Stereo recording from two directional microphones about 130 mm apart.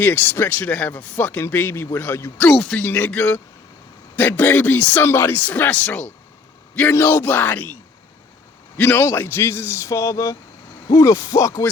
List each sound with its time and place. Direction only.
0.0 s speech: 15° left (ahead or behind)
2.5 s speech: centre (ahead or behind)
2.8 s speech: 15° left (ahead or behind)
8.8 s speech: 20° left (ahead or behind)